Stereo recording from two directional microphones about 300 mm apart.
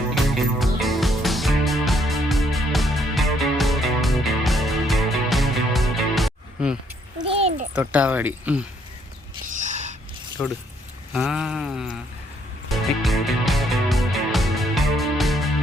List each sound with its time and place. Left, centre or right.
0.1 s music: centre
7.2 s a sound: centre
7.8 s speech: centre
9.5 s a sound: right
10.4 s speech: centre
12.6 s music: centre